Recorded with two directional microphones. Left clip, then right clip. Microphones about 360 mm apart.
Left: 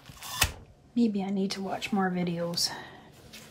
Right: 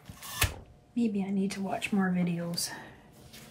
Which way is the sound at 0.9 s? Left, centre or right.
Centre.